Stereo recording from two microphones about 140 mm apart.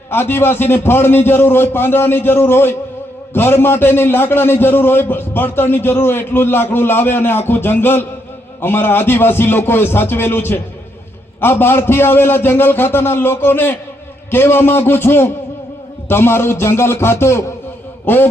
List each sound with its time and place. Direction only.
0.1 s a man's voice: 15° left (ahead or behind)